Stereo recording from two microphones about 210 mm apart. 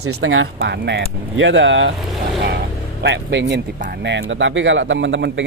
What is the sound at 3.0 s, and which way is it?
Speech, 55° right (ahead or behind).